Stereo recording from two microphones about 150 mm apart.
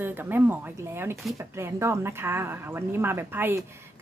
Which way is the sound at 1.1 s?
Centre (ahead or behind).